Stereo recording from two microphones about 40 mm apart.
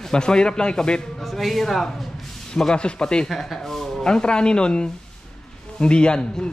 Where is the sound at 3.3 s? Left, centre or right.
Centre.